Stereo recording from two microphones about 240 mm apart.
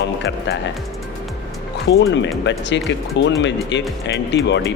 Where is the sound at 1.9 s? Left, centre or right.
Left.